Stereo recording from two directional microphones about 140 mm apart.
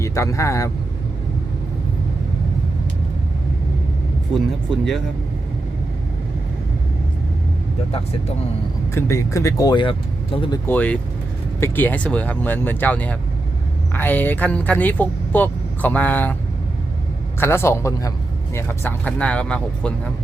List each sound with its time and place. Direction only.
0.0 s speech: 20° left (ahead or behind)
9.0 s speech: 20° left (ahead or behind); by 10.6 s 35° left (ahead or behind)
10.7 s speech: 10° left (ahead or behind)
17.4 s speech: 15° left (ahead or behind)